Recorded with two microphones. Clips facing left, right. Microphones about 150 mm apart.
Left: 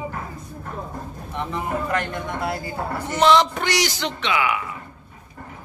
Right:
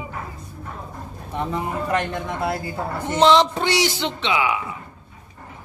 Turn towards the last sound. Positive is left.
turn(degrees=-20)  # may be behind; listen again after turning